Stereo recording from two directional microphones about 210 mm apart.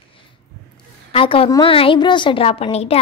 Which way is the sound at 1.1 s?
25° left (ahead or behind).